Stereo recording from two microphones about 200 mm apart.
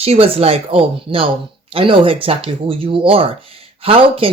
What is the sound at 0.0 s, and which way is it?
Speech, 30° right (ahead or behind).